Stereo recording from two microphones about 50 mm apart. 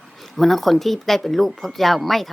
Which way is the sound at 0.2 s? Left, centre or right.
Centre.